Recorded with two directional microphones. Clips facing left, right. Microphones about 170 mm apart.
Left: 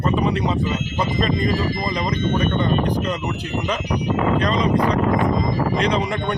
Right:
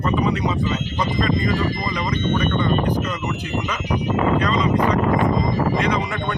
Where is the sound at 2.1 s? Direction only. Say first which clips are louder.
Right 1 dB; 35° left (ahead or behind).